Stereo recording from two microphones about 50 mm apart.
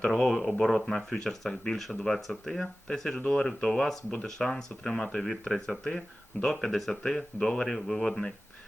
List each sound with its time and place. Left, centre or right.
0.0 s speech: left
0.3 s speech: centre
3.2 s speech: left
3.4 s speech: centre
6.7 s speech: centre